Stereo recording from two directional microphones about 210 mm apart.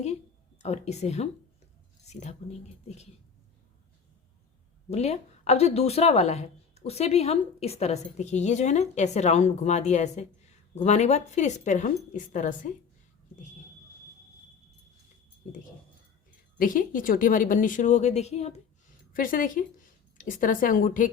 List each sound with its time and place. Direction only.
0.6 s speech: 30° left (ahead or behind)
4.9 s speech: 30° left (ahead or behind)
16.6 s speech: 40° left (ahead or behind)